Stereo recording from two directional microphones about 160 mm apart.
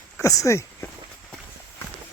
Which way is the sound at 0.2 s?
20° left (ahead or behind).